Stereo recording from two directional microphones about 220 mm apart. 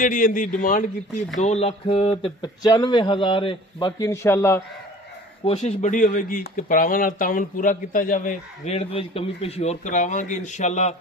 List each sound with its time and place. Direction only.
0.0 s speech: 35° left (ahead or behind); by 4.6 s 10° left (ahead or behind)
5.4 s speech: 25° left (ahead or behind)